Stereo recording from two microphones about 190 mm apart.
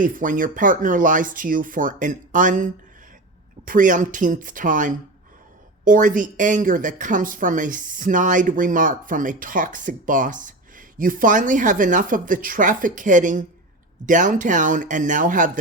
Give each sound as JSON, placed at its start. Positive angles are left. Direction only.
{"t": 0.0, "sound": "speech", "side_deg": -45}
{"t": 3.7, "sound": "speech", "side_deg": -45}